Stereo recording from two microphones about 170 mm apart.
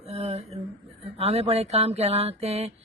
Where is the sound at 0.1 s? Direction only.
35° right (ahead or behind).